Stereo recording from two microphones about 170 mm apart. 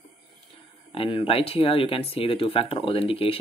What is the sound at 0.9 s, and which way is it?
Speech, 35° left (ahead or behind).